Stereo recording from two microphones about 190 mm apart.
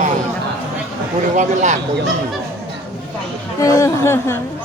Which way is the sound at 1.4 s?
40° right (ahead or behind).